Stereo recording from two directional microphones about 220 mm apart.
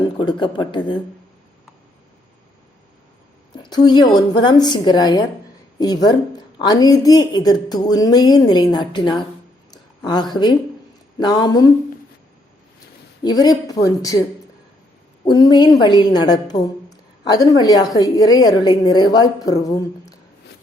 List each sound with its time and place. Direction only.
0.2 s a woman's voice: 20° left (ahead or behind)
3.5 s a woman's voice: 20° left (ahead or behind)
13.2 s a woman's voice: 15° left (ahead or behind)
15.2 s a woman's voice: 20° left (ahead or behind)